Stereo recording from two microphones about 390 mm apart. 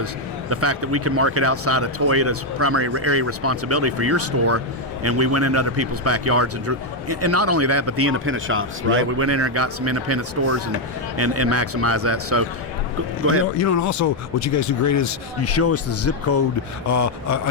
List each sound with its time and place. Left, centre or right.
0.5 s a man's voice: right
13.6 s speech: left